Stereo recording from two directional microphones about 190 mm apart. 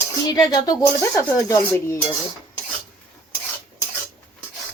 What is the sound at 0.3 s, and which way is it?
Speech, 20° left (ahead or behind).